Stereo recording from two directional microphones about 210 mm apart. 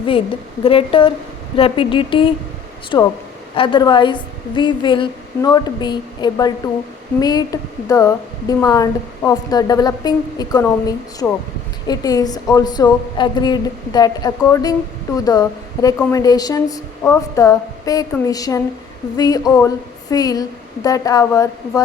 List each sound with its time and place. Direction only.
0.6 s a woman's voice: 25° left (ahead or behind)